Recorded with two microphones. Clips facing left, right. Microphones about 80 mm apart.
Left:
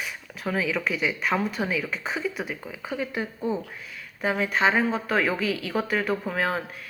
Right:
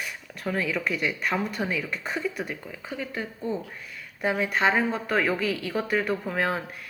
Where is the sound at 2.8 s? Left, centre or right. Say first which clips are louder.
Left 5 dB; centre.